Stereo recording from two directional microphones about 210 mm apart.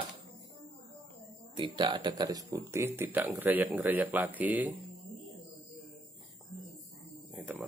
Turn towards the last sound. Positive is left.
turn(degrees=-5)  # may be behind; listen again after turning